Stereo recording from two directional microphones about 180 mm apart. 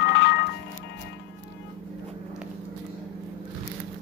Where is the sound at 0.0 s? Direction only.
70° left (ahead or behind).